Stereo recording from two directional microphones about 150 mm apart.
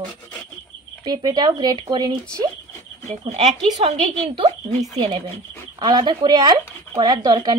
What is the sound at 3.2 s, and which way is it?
A woman's voice, 45° right (ahead or behind).